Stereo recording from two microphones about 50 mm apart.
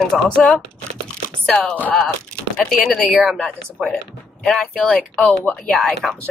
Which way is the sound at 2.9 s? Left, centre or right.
Centre.